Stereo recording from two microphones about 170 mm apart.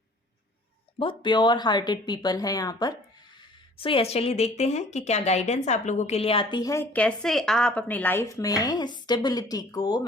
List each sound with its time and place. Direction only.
0.9 s speech: 30° left (ahead or behind)
6.9 s speech: 5° left (ahead or behind); by 10.1 s 25° left (ahead or behind)